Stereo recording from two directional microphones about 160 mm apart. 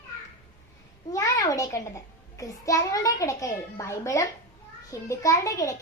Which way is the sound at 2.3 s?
20° left (ahead or behind).